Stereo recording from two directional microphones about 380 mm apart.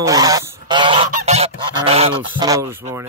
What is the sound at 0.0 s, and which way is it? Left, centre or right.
Goose, centre.